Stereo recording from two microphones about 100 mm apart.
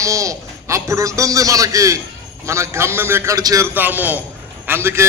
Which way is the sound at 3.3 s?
35° right (ahead or behind).